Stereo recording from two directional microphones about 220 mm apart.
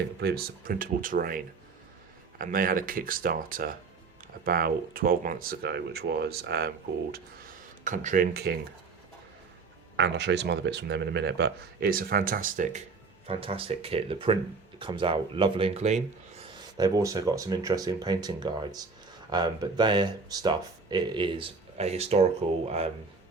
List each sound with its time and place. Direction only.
0.2 s speech: 45° right (ahead or behind)
2.4 s speech: 40° right (ahead or behind)
10.0 s speech: 50° right (ahead or behind); by 12.8 s 35° right (ahead or behind)
13.2 s speech: 25° right (ahead or behind)
16.7 s speech: 15° right (ahead or behind)